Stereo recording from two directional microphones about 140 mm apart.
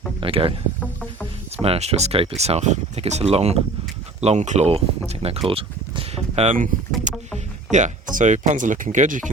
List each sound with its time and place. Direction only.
0.2 s speech: 40° right (ahead or behind)
1.6 s speech: 45° right (ahead or behind)
5.5 s a sound: 40° right (ahead or behind)
7.1 s rowboat: 60° right (ahead or behind)
7.7 s speech: 60° right (ahead or behind)